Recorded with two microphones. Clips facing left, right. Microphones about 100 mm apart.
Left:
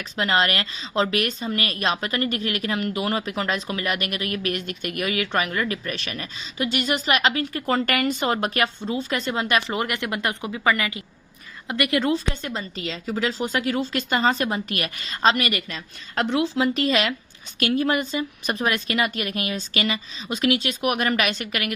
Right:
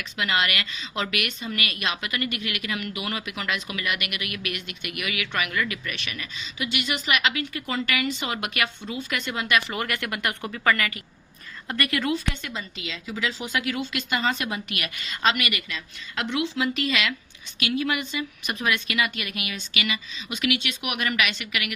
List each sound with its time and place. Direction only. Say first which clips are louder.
0.0 s speech: left 4 dB; 35° left (ahead or behind)